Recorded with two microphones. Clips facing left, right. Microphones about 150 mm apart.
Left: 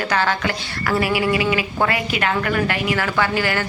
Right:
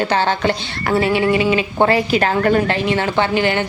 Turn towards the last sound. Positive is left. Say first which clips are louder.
# right 4 dB
turn(degrees=-25)  # may be behind; listen again after turning